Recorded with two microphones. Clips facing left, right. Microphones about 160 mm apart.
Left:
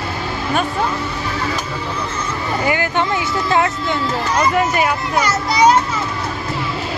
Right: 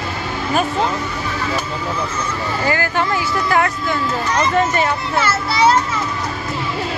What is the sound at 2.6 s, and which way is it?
Speech, 20° left (ahead or behind).